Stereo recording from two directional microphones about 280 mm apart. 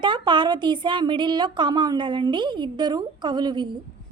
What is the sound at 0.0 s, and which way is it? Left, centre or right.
A woman's voice, centre.